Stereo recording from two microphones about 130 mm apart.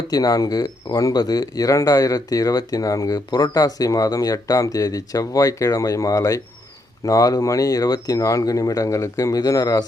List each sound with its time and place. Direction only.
0.1 s speech: 30° left (ahead or behind)